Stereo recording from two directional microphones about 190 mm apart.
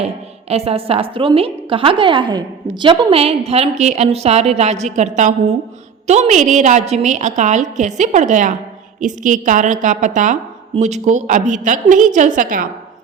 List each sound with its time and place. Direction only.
0.4 s a woman's voice: 30° right (ahead or behind)